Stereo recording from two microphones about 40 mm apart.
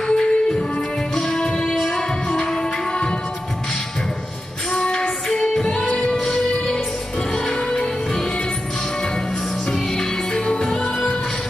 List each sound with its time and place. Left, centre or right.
0.0 s music: centre
4.9 s music: centre
6.1 s music: centre
9.7 s music: centre
10.8 s music: centre